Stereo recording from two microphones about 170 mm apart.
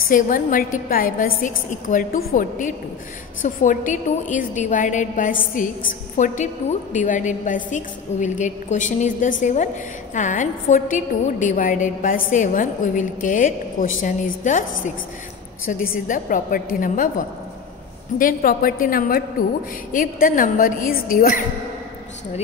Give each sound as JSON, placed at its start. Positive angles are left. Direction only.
{"t": 0.0, "sound": "a woman's voice", "side_deg": 55}
{"t": 18.1, "sound": "a woman's voice", "side_deg": 55}